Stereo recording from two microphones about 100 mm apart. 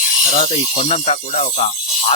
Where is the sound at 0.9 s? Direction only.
90° left.